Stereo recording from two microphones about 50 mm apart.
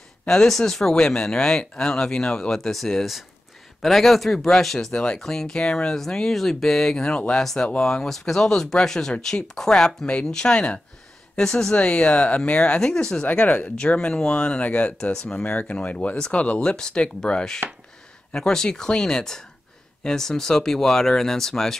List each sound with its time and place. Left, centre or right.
0.3 s speech: centre
4.9 s speech: centre
11.7 s speech: left
12.9 s speech: centre
13.2 s speech: left
13.7 s speech: left